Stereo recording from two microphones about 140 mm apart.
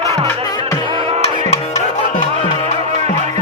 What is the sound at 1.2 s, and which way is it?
Music, 55° left (ahead or behind).